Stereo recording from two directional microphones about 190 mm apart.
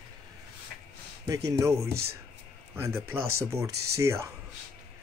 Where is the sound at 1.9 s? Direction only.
55° right (ahead or behind).